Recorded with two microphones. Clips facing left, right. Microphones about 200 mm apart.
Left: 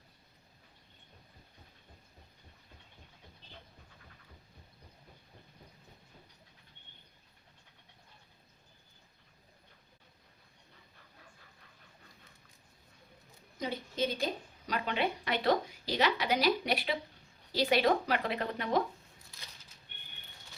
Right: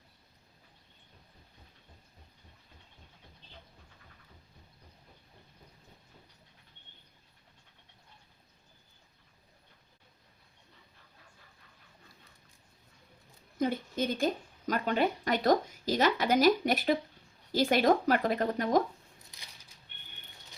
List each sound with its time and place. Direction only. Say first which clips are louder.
13.6 s a woman's voice: right 4 dB; 50° right (ahead or behind)